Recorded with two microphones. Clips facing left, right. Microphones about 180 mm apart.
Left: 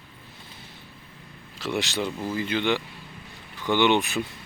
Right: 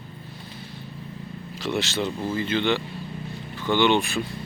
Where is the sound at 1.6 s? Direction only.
15° left (ahead or behind).